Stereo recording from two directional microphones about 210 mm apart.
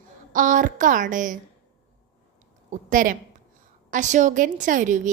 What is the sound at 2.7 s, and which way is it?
A woman's voice, 40° right (ahead or behind).